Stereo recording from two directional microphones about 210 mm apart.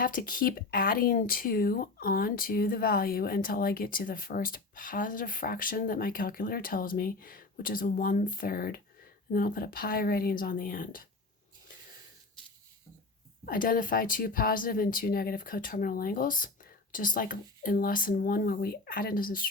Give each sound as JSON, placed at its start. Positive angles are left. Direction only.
{"t": 0.0, "sound": "speech", "side_deg": 40}
{"t": 13.4, "sound": "speech", "side_deg": 45}